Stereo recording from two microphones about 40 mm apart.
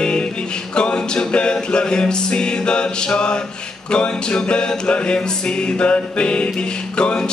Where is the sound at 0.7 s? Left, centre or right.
Left.